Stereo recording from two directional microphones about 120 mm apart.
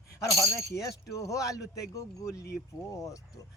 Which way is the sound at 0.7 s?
25° left (ahead or behind).